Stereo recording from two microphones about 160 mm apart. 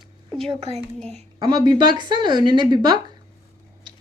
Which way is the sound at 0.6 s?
40° right (ahead or behind).